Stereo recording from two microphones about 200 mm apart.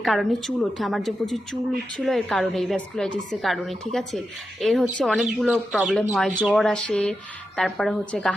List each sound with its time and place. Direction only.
0.0 s speech: centre (ahead or behind)